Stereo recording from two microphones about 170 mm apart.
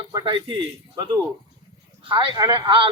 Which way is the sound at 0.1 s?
25° right (ahead or behind).